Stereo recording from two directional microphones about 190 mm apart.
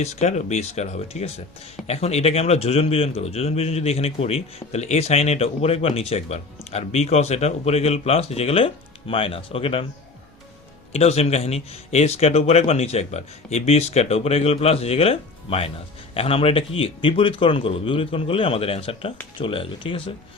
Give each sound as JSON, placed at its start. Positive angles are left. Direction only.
{"t": 0.0, "sound": "speech", "side_deg": 35}
{"t": 10.9, "sound": "a man's voice", "side_deg": 35}